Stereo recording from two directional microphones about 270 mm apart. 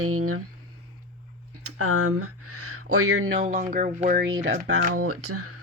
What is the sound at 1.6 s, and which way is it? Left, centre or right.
Speech, right.